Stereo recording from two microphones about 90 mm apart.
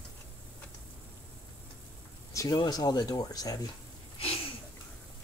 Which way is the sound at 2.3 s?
45° left (ahead or behind).